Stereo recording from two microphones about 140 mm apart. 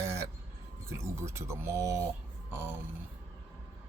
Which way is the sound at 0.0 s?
20° right (ahead or behind).